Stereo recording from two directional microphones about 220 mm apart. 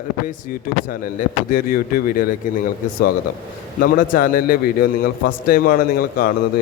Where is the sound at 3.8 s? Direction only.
40° left (ahead or behind).